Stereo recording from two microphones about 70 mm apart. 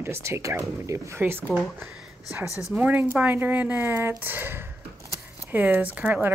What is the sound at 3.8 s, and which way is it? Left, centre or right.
Speech, right.